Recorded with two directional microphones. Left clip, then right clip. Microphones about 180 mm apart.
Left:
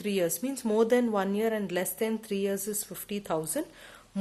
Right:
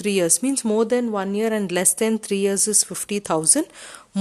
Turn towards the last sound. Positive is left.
turn(degrees=-45)  # may be behind; listen again after turning